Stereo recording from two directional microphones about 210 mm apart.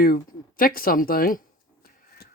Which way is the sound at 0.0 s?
45° left (ahead or behind).